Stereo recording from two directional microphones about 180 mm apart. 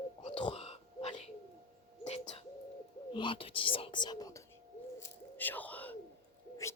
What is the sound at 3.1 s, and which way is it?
Speech, 30° left (ahead or behind).